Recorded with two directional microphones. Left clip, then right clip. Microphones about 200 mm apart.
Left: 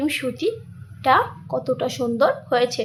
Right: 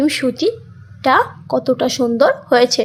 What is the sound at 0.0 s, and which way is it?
A woman's voice, 25° right (ahead or behind).